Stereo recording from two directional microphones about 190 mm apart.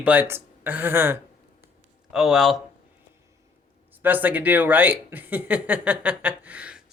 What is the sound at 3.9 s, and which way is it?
Speech, 10° right (ahead or behind).